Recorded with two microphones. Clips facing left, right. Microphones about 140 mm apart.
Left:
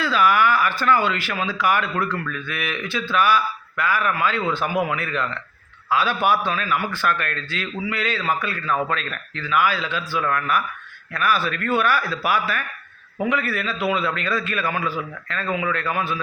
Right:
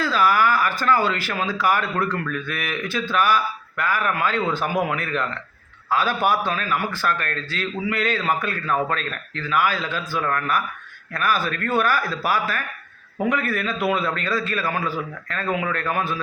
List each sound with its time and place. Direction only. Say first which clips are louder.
0.0 s a man's voice: left 1 dB; 40° right (ahead or behind)